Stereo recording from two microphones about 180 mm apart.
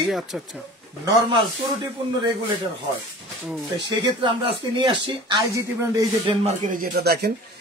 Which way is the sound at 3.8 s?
25° right (ahead or behind).